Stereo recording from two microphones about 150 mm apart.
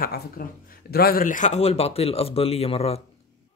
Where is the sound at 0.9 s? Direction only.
85° left; by 2.9 s 40° left (ahead or behind).